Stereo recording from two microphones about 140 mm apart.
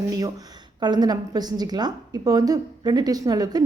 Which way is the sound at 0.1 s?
25° right (ahead or behind).